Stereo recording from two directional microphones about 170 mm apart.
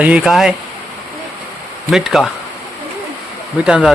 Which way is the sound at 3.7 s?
5° right (ahead or behind).